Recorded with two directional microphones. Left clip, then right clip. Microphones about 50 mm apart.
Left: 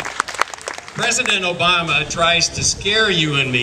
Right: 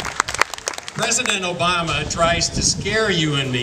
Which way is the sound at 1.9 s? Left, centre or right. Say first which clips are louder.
Left 3 dB; centre.